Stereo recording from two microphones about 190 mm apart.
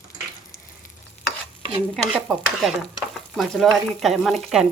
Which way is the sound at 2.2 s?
Centre (ahead or behind).